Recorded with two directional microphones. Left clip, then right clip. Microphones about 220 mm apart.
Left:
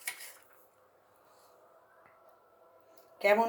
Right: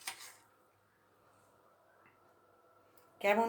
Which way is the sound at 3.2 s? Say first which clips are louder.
Left 5 dB; 40° right (ahead or behind).